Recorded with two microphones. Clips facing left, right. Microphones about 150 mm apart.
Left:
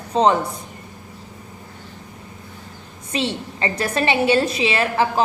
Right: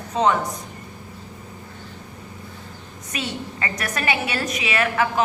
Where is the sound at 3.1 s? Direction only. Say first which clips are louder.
Left 5 dB; 30° left (ahead or behind).